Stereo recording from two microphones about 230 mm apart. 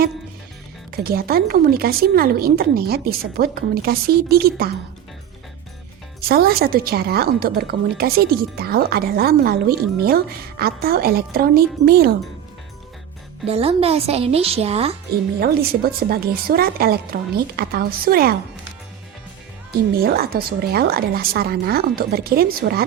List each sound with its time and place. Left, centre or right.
0.9 s a woman's voice: right
6.2 s a woman's voice: right
13.4 s speech: right
15.1 s a woman's voice: right
20.0 s a woman's voice: right